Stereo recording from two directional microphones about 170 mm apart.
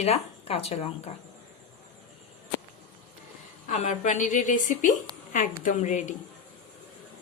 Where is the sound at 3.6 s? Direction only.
45° left (ahead or behind).